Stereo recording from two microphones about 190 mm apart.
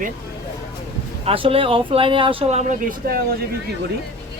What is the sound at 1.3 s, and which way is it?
Speech, 30° right (ahead or behind).